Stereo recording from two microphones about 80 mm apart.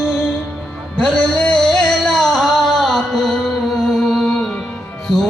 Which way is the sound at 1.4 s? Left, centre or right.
Centre.